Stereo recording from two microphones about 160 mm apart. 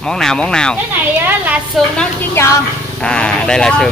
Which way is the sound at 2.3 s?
15° left (ahead or behind).